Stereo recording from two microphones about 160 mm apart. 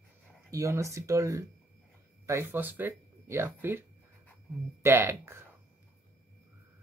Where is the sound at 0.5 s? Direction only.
20° right (ahead or behind).